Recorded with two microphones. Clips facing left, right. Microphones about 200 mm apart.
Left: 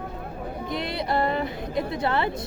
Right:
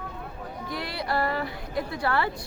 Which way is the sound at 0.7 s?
20° left (ahead or behind).